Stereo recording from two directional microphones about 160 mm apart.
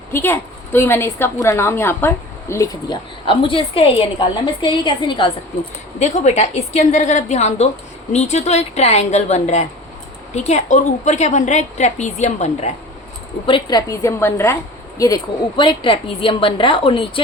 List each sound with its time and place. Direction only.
0.1 s a woman's voice: 15° left (ahead or behind)
2.9 s a woman's voice: 35° left (ahead or behind)
6.0 s a woman's voice: 45° left (ahead or behind)
13.5 s a woman's voice: 25° left (ahead or behind)